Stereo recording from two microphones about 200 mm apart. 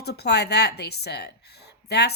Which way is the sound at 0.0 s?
55° left (ahead or behind).